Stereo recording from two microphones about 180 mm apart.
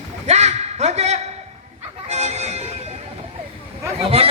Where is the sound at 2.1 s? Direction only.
35° right (ahead or behind).